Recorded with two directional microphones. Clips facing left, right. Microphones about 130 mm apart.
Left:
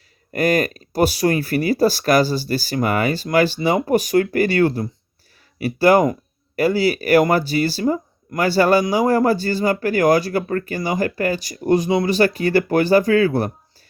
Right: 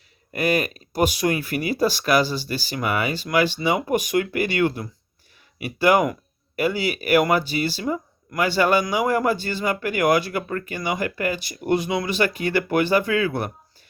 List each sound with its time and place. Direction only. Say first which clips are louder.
0.3 s speech: left 4 dB; 40° left (ahead or behind)